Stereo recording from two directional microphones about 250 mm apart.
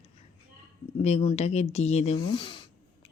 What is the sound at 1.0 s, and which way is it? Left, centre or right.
Speech, left.